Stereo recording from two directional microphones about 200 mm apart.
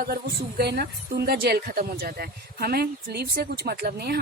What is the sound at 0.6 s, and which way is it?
A woman's voice, 55° right (ahead or behind).